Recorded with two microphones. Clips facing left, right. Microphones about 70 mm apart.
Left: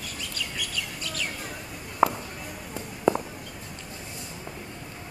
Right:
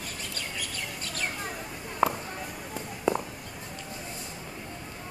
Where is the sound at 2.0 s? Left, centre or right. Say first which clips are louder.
Left 3 dB; centre.